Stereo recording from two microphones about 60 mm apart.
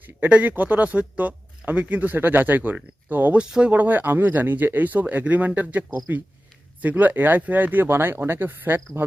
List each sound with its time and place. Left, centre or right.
0.0 s speech: right
3.3 s speech: centre
3.7 s speech: right